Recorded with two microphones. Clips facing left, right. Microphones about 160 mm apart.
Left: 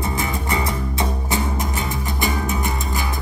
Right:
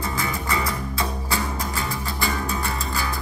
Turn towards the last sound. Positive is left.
turn(degrees=20)  # may be behind; listen again after turning